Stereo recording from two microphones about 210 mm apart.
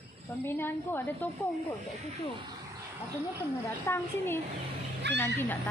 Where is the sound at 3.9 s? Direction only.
10° left (ahead or behind).